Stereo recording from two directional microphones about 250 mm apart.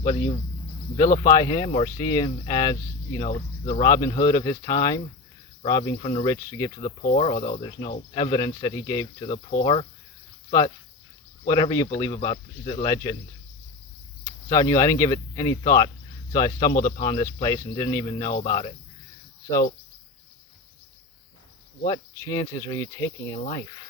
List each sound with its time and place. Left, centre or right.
0.0 s speech: centre
7.0 s speech: left
8.1 s speech: centre
9.3 s speech: left
11.4 s speech: centre
14.3 s speech: centre
21.8 s speech: centre